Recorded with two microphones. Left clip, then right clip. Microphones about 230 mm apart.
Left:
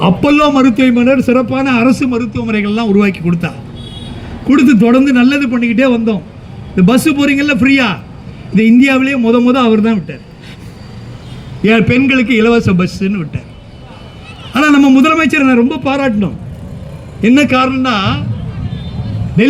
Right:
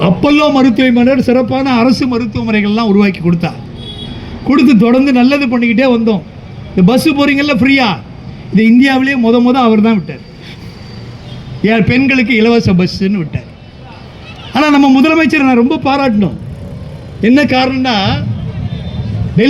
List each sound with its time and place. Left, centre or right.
0.0 s a man's voice: right
11.6 s a man's voice: right
14.5 s a man's voice: right